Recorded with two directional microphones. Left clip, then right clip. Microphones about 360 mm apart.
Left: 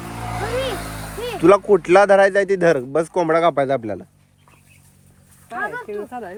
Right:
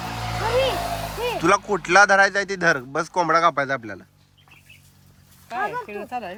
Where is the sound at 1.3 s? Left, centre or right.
Centre.